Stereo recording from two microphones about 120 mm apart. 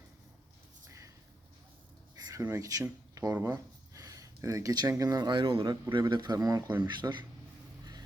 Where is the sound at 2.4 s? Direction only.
25° right (ahead or behind).